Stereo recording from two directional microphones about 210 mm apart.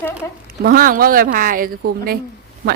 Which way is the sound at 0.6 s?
45° right (ahead or behind).